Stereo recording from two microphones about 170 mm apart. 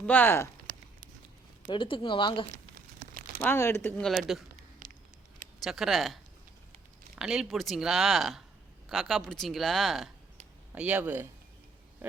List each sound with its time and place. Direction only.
0.0 s speech: 10° left (ahead or behind)
1.7 s speech: 30° left (ahead or behind)
3.4 s speech: 15° left (ahead or behind)
4.1 s speech: centre (ahead or behind)
4.8 s a sound: 50° right (ahead or behind)
5.6 s speech: centre (ahead or behind)
7.2 s speech: 5° right (ahead or behind)